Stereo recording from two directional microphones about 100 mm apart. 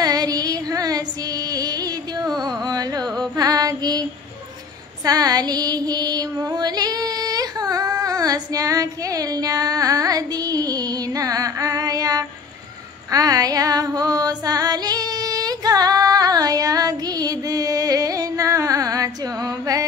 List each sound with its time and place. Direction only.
0.0 s female singing: 40° right (ahead or behind)
1.5 s music: 40° right (ahead or behind)
5.0 s music: 40° right (ahead or behind)
13.1 s female singing: 40° right (ahead or behind)